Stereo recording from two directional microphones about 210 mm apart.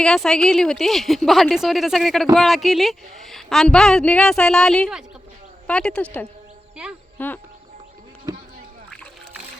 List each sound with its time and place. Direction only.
0.0 s a woman's voice: 5° left (ahead or behind)